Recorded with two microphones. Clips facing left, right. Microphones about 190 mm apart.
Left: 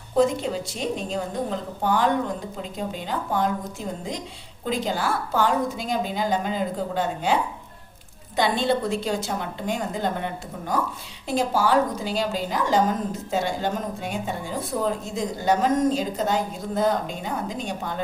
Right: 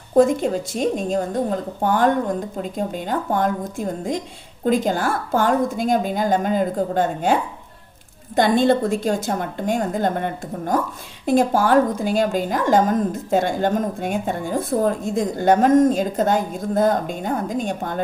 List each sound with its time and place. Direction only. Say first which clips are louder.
0.1 s a woman's voice: right 5 dB; 50° right (ahead or behind)
8.4 s a woman's voice: right 6 dB; 50° right (ahead or behind)